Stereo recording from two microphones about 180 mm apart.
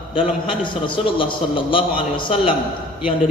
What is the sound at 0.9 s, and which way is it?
A man's voice, 30° left (ahead or behind).